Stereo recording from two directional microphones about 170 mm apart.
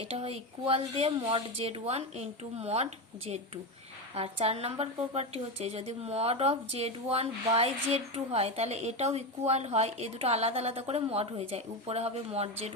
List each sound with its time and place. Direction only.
0.0 s speech: 35° right (ahead or behind)